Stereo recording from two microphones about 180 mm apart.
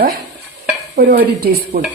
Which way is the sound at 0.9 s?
55° right (ahead or behind).